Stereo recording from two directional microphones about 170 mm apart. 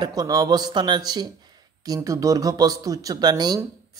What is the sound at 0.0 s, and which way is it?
Speech, 20° right (ahead or behind).